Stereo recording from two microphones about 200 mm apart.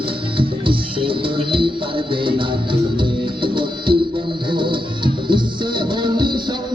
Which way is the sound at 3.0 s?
25° right (ahead or behind).